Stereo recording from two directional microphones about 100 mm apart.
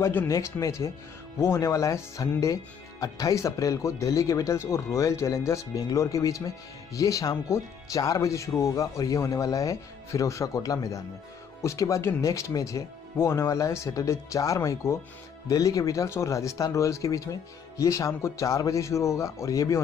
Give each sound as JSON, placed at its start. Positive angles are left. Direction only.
{"t": 0.0, "sound": "speech", "side_deg": 20}
{"t": 0.3, "sound": "speech", "side_deg": 30}